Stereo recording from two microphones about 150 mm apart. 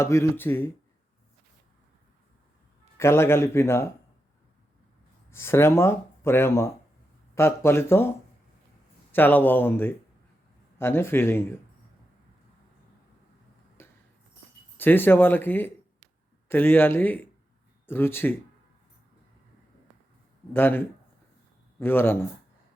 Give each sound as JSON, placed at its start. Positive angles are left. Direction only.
{"t": 0.0, "sound": "speech", "side_deg": 20}
{"t": 3.0, "sound": "speech", "side_deg": 15}
{"t": 5.3, "sound": "speech", "side_deg": 15}
{"t": 9.1, "sound": "speech", "side_deg": 10}
{"t": 13.8, "sound": "a sound", "side_deg": 15}
{"t": 14.8, "sound": "speech", "side_deg": 15}
{"t": 20.5, "sound": "speech", "side_deg": 15}